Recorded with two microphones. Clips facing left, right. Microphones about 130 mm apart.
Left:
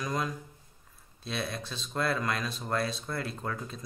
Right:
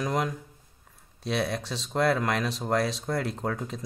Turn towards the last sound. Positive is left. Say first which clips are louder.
# right 5 dB
turn(degrees=-75)  # may be behind; listen again after turning